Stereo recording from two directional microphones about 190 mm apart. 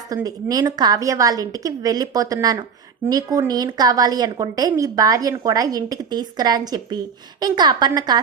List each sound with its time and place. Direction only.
0.1 s a woman's voice: 20° right (ahead or behind)